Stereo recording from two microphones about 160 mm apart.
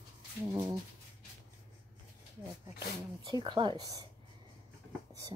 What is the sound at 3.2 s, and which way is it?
Speech, 30° right (ahead or behind).